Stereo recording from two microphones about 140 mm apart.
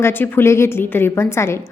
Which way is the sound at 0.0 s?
15° left (ahead or behind).